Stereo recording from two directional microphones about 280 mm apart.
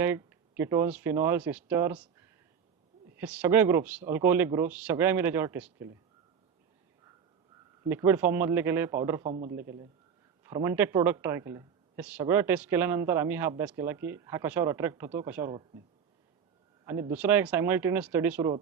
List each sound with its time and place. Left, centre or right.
0.0 s speech: centre
7.9 s speech: centre
9.2 s a man's voice: right
9.5 s speech: centre
16.8 s speech: centre